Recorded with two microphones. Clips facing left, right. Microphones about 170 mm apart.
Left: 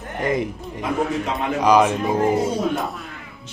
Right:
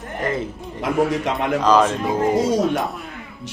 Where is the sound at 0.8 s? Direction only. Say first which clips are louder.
Right 3 dB; 80° right.